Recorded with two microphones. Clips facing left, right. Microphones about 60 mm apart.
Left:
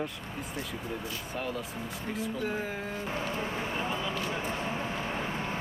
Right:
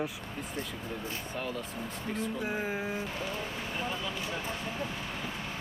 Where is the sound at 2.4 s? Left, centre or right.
Centre.